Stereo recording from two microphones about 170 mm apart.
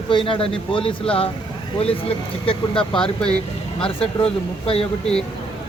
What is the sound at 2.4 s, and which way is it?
Speech, 30° left (ahead or behind).